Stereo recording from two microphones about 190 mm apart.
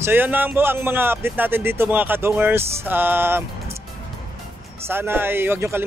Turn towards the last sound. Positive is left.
turn(degrees=-10)  # may be behind; listen again after turning